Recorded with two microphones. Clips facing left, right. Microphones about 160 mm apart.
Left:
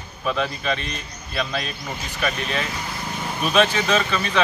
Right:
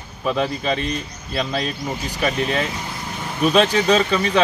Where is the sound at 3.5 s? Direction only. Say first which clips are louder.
Right 2 dB; 20° right (ahead or behind).